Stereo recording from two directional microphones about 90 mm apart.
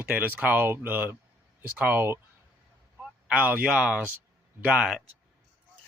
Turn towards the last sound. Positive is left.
turn(degrees=-10)  # may be behind; listen again after turning